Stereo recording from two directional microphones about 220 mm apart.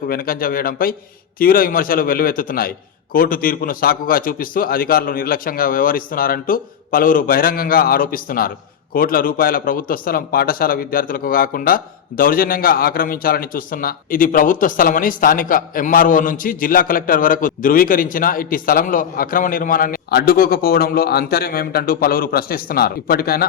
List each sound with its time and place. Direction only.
0.1 s a man's voice: 40° left (ahead or behind)